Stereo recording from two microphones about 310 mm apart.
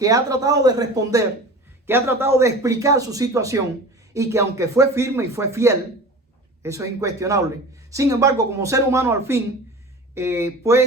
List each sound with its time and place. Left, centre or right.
0.0 s speech: centre